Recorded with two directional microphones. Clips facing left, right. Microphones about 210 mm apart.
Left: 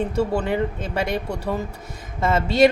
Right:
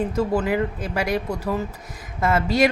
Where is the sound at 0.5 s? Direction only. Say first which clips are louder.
Even; 25° left (ahead or behind).